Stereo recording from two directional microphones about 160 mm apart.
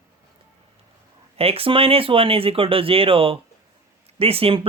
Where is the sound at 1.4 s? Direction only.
35° right (ahead or behind).